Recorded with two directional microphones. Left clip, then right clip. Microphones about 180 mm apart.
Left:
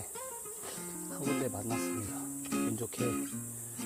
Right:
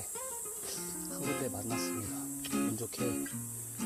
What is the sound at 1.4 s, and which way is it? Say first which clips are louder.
Speech: left 1 dB; 15° left (ahead or behind).